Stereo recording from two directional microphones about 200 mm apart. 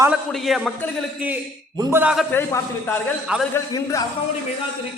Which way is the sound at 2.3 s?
10° left (ahead or behind).